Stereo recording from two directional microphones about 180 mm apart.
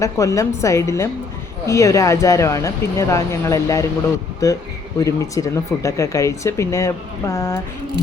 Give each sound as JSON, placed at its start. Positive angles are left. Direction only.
{"t": 0.0, "sound": "speech", "side_deg": 15}